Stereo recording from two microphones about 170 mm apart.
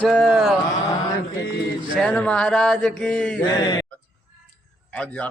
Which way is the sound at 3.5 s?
25° left (ahead or behind).